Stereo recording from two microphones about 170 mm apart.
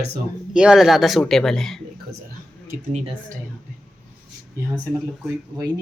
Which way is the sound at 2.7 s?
45° right (ahead or behind).